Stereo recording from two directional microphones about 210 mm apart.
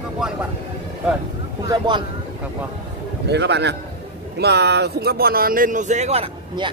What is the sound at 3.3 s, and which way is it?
A man's voice, 55° right (ahead or behind).